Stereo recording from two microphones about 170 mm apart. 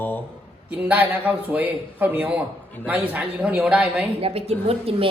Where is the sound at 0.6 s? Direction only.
10° right (ahead or behind).